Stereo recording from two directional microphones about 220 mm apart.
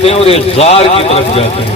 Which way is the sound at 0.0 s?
25° left (ahead or behind).